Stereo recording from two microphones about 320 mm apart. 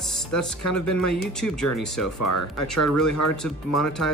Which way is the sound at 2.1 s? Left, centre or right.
Left.